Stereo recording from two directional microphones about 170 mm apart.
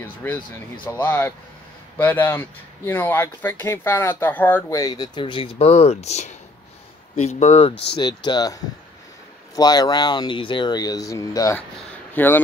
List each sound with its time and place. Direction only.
0.0 s speech: 10° left (ahead or behind); by 7.7 s 40° left (ahead or behind)
7.7 s speech: 80° left
8.0 s speech: 25° left (ahead or behind)
9.6 s speech: 25° left (ahead or behind)
11.9 s a sound: 10° left (ahead or behind)